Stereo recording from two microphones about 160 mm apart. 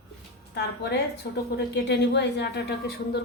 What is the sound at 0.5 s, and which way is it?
A woman's voice, 90° left.